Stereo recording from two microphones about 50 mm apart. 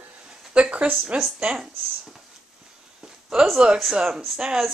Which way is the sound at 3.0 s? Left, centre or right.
Centre.